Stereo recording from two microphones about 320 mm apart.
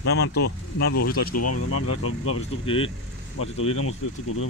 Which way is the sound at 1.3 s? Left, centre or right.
Left.